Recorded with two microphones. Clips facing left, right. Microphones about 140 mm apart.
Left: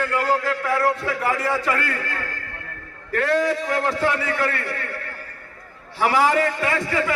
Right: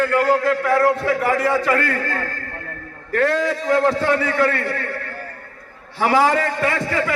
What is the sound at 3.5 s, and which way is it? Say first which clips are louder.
A man's voice: right 5 dB; 35° right (ahead or behind).